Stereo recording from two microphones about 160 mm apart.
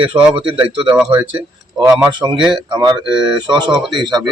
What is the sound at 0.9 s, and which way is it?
Speech, 5° right (ahead or behind).